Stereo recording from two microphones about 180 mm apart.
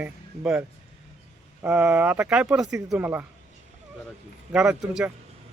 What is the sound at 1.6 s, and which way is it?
Speech, 10° right (ahead or behind).